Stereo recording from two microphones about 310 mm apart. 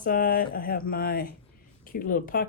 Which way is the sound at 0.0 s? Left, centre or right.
Left.